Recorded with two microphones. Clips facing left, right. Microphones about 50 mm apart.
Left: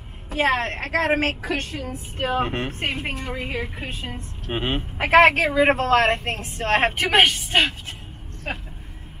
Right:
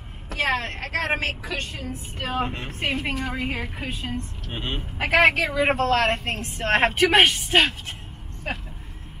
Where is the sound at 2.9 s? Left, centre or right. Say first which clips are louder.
Right 2 dB; centre.